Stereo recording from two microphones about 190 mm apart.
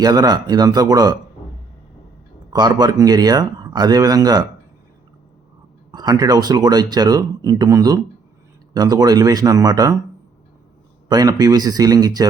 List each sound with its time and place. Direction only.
0.0 s speech: 20° right (ahead or behind)
2.5 s speech: 20° right (ahead or behind)
5.9 s speech: 20° right (ahead or behind)
11.1 s speech: 20° right (ahead or behind)